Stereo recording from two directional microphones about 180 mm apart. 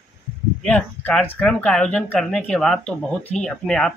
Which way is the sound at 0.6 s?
5° left (ahead or behind).